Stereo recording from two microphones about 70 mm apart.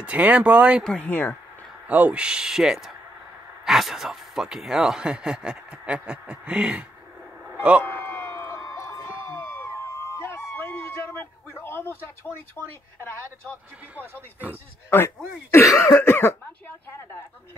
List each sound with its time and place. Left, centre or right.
0.0 s speech: centre
1.0 s speech: left
1.9 s speech: right
7.8 s a sound: left
11.5 s speech: left
14.9 s speech: left